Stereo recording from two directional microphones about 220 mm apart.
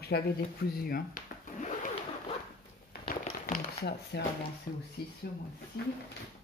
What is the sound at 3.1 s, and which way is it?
Tap, 35° left (ahead or behind).